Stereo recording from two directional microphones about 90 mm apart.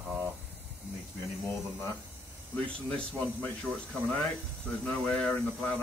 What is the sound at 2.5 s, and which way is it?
Speech, 10° left (ahead or behind).